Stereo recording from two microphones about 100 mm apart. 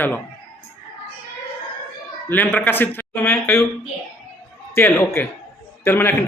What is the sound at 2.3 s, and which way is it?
A man's voice, 15° left (ahead or behind).